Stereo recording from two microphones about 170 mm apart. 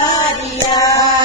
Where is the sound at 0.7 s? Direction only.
20° left (ahead or behind).